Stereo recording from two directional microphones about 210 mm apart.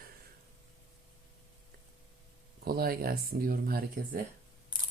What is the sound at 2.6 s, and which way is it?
Speech, 45° right (ahead or behind).